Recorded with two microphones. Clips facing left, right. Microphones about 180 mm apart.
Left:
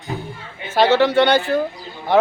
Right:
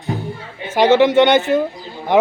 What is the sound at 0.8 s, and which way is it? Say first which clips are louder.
Speech: right 3 dB; 20° right (ahead or behind).